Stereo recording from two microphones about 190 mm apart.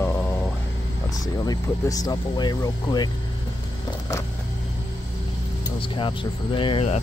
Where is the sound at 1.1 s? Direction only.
20° left (ahead or behind).